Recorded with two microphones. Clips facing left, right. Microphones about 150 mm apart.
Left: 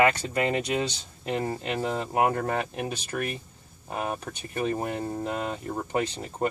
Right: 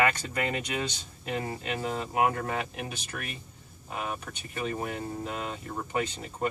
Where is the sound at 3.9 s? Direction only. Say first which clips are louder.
Left 4 dB; 40° left (ahead or behind).